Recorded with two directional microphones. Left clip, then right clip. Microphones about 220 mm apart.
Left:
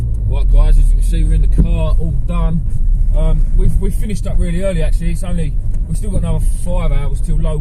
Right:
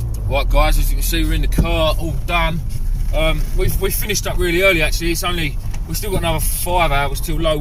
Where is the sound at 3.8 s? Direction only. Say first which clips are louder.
Right 9 dB; 50° right (ahead or behind).